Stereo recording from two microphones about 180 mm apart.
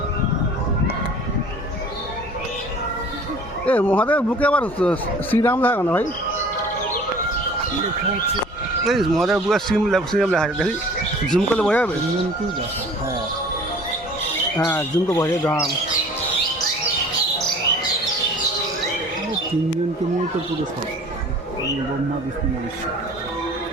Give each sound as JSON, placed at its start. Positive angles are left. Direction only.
{"t": 3.7, "sound": "a man's voice", "side_deg": 10}
{"t": 8.8, "sound": "a man's voice", "side_deg": 0}
{"t": 14.7, "sound": "a man's voice", "side_deg": 15}